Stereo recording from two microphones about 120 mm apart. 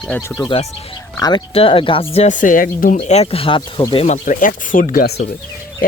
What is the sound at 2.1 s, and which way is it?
Speech, 80° left.